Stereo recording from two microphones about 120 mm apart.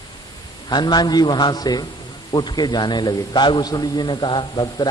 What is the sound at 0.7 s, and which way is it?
A man's voice, 35° left (ahead or behind).